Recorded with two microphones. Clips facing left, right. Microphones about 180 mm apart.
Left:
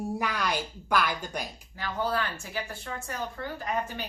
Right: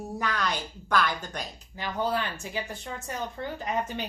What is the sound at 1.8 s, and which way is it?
A woman's voice, 20° right (ahead or behind).